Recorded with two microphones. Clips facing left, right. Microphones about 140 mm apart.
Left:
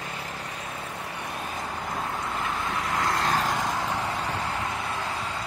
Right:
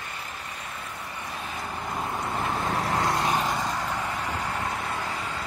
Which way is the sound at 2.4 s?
35° right (ahead or behind).